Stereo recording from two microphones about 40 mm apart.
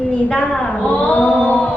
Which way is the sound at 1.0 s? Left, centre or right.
Left.